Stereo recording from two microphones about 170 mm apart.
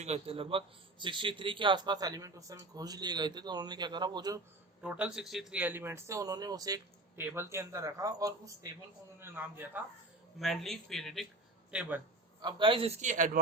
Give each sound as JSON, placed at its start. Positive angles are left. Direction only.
{"t": 0.0, "sound": "a man's voice", "side_deg": -35}
{"t": 4.8, "sound": "a man's voice", "side_deg": -10}
{"t": 10.4, "sound": "speech", "side_deg": 0}
{"t": 12.4, "sound": "a man's voice", "side_deg": -25}